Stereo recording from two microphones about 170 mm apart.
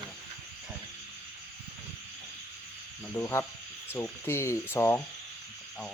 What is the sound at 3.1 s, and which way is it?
Speech, 15° left (ahead or behind).